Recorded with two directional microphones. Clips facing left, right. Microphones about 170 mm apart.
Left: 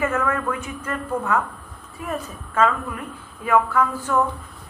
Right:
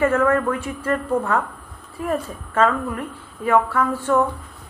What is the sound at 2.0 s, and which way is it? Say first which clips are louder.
A woman's voice: right 5 dB; 30° right (ahead or behind).